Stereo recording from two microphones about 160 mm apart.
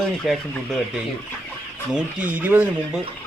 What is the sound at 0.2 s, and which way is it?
Speech, centre (ahead or behind).